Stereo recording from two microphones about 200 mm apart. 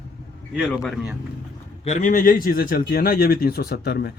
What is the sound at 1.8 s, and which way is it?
Speech, 35° left (ahead or behind).